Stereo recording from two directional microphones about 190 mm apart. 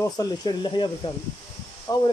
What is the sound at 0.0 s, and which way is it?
Speech, 20° left (ahead or behind).